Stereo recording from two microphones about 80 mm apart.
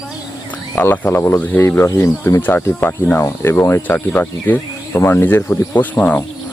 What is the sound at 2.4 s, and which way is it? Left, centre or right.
Speech, left.